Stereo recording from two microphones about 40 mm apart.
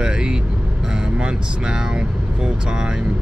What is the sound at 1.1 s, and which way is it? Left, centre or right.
Speech, right.